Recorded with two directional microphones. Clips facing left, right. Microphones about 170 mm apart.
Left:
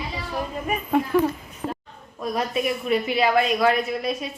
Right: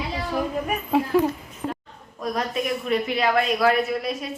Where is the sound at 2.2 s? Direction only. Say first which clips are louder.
Left 1 dB; 5° left (ahead or behind).